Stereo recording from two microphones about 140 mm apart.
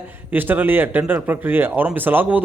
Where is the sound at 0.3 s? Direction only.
15° right (ahead or behind).